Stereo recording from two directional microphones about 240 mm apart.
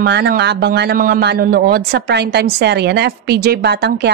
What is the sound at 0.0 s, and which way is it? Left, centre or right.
A woman's voice, right.